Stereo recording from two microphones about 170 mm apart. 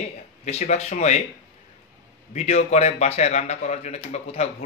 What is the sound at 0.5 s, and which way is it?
Speech, 40° left (ahead or behind).